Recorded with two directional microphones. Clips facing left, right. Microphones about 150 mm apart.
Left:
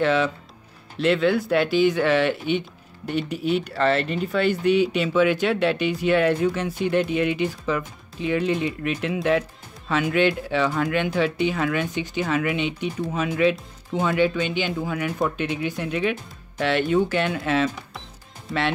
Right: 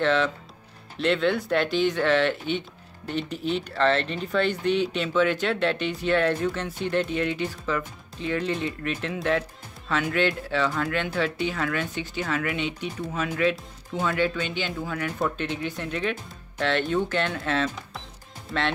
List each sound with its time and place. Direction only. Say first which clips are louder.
0.0 s speech: left 2 dB; 10° left (ahead or behind)